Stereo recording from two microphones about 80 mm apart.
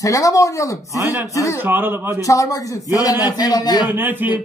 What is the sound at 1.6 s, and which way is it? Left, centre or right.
Speech, right.